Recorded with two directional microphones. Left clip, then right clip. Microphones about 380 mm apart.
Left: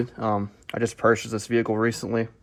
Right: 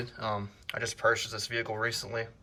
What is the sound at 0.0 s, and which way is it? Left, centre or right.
Speech, centre.